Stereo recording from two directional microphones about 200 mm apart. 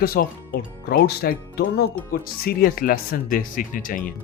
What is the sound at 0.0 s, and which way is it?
Speech, 50° left (ahead or behind).